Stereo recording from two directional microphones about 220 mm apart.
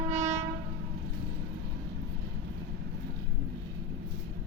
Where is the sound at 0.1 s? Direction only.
30° right (ahead or behind).